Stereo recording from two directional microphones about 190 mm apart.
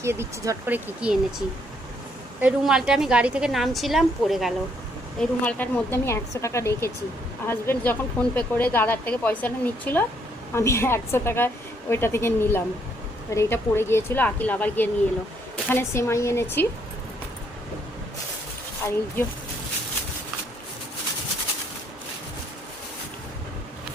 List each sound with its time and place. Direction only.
0.0 s speech: 15° right (ahead or behind)
2.4 s a woman's voice: 5° right (ahead or behind); by 16.6 s 15° left (ahead or behind)
18.8 s speech: 15° left (ahead or behind)